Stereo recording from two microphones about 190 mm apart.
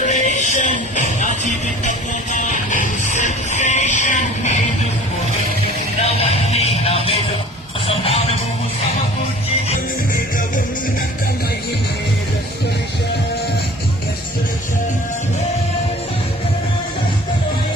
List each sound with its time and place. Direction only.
0.0 s music: 40° left (ahead or behind)
6.0 s music: 35° left (ahead or behind)